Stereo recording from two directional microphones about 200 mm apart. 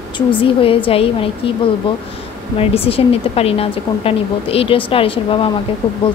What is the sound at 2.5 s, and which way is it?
Speech, 30° left (ahead or behind).